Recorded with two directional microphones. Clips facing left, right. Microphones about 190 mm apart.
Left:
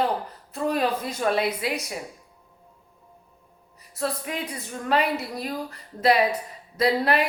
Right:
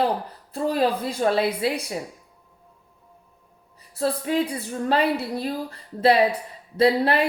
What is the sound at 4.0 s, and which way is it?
A woman's voice, 30° right (ahead or behind).